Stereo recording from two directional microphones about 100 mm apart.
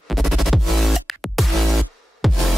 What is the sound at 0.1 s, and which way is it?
Music, centre (ahead or behind).